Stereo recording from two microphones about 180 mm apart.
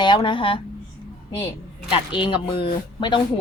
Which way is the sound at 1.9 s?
25° left (ahead or behind).